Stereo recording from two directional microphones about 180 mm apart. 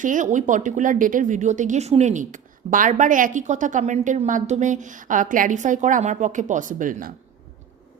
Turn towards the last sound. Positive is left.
turn(degrees=-50)  # may be behind; listen again after turning